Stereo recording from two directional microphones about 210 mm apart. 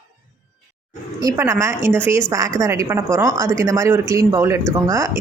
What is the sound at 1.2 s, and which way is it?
A woman's voice, 15° right (ahead or behind).